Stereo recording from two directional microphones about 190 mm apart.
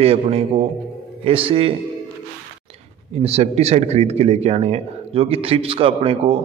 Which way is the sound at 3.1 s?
35° right (ahead or behind).